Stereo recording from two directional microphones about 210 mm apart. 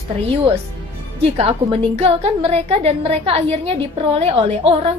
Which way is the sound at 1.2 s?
30° right (ahead or behind).